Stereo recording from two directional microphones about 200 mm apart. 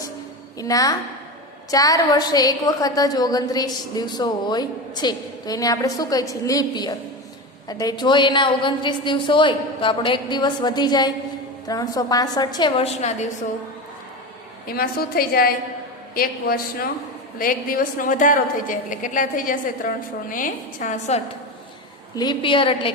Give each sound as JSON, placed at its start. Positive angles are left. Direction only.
{"t": 0.6, "sound": "a woman's voice", "side_deg": 15}
{"t": 14.7, "sound": "a woman's voice", "side_deg": 50}
{"t": 22.1, "sound": "a woman's voice", "side_deg": 20}